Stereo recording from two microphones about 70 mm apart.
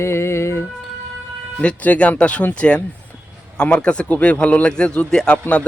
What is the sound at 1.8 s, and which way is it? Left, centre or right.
Speech, left.